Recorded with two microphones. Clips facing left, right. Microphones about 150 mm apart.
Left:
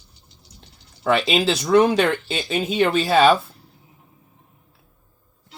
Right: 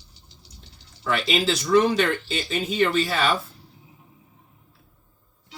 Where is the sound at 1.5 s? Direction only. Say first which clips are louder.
Left 3 dB; 65° left (ahead or behind).